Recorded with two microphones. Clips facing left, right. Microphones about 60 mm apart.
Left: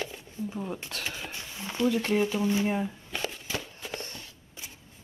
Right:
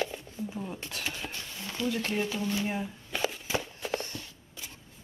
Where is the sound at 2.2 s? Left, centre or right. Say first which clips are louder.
Left 5 dB; centre.